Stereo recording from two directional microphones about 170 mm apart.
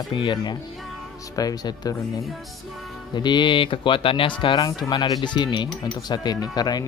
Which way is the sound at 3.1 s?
25° left (ahead or behind).